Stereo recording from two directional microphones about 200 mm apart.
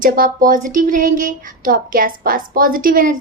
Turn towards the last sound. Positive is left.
turn(degrees=-45)  # may be behind; listen again after turning